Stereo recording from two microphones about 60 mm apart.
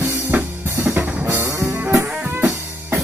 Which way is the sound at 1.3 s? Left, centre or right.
Right.